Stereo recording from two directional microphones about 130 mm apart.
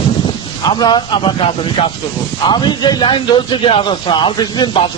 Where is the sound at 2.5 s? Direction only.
35° left (ahead or behind).